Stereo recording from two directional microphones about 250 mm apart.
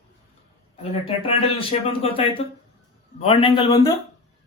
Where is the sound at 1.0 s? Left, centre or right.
Left.